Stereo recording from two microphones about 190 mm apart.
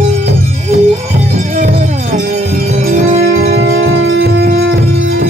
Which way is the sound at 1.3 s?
40° right (ahead or behind).